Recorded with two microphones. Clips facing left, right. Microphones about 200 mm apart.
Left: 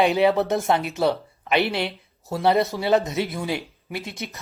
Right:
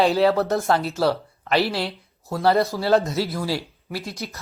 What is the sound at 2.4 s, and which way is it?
Speech, 20° left (ahead or behind).